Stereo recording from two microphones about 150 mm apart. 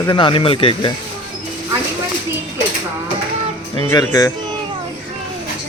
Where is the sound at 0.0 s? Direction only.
30° left (ahead or behind).